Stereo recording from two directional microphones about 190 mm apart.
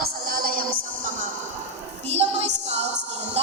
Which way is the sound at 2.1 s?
35° right (ahead or behind).